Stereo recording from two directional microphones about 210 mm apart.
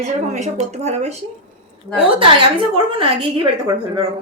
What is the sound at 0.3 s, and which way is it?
Speech, 30° right (ahead or behind).